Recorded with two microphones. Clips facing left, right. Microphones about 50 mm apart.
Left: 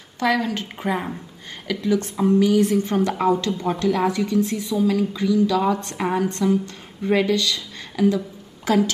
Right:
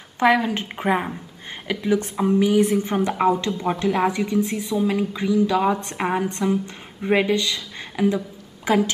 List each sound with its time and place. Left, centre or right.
0.2 s a woman's voice: right